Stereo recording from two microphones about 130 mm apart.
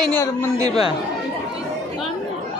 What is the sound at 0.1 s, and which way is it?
Speech, 20° left (ahead or behind).